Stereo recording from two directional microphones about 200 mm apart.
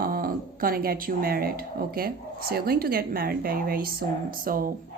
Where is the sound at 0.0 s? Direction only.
45° right (ahead or behind).